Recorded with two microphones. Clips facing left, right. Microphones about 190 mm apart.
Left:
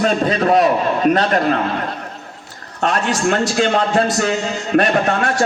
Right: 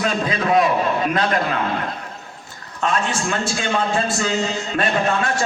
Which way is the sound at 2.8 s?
60° left (ahead or behind).